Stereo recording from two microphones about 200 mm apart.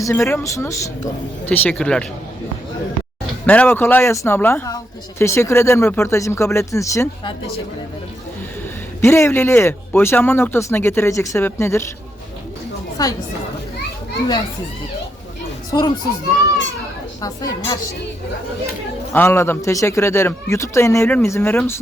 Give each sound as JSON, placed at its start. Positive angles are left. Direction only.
{"t": 0.0, "sound": "speech", "side_deg": 15}
{"t": 3.4, "sound": "speech", "side_deg": 5}
{"t": 9.0, "sound": "speech", "side_deg": 15}
{"t": 13.0, "sound": "a woman's voice", "side_deg": 20}
{"t": 15.7, "sound": "speech", "side_deg": 15}
{"t": 17.2, "sound": "a woman's voice", "side_deg": 20}
{"t": 19.1, "sound": "speech", "side_deg": 10}